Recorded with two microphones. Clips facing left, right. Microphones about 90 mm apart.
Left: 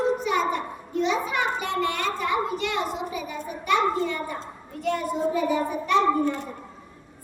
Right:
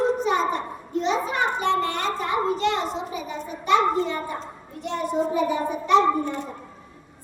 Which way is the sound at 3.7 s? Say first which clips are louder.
Right 3 dB; 25° right (ahead or behind).